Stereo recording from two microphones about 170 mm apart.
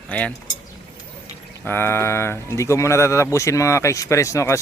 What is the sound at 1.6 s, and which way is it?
Speech, 15° left (ahead or behind).